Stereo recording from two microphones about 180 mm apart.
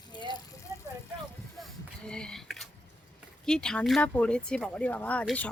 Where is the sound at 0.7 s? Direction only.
20° right (ahead or behind).